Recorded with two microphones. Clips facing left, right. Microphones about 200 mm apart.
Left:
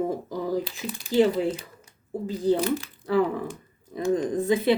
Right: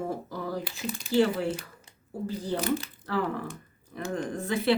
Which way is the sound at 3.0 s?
15° left (ahead or behind).